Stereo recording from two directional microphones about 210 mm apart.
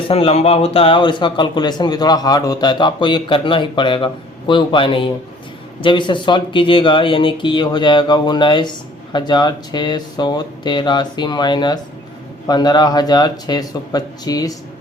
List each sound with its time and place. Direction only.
0.1 s a man's voice: 30° left (ahead or behind)